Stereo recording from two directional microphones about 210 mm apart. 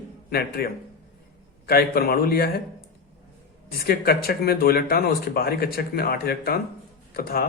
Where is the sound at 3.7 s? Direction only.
45° left (ahead or behind).